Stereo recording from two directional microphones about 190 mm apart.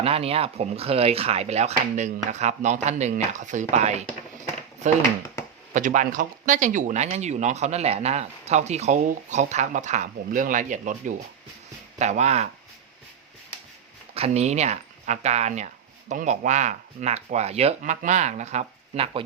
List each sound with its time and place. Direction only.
0.0 s speech: 30° right (ahead or behind)
5.7 s speech: 40° right (ahead or behind)
14.1 s speech: 35° right (ahead or behind)